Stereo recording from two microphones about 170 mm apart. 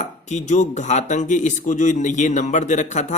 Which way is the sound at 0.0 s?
45° left (ahead or behind).